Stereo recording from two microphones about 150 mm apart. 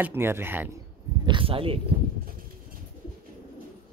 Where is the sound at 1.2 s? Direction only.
35° right (ahead or behind).